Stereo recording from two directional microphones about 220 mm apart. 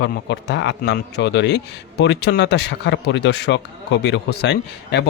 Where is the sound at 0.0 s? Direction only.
50° left (ahead or behind).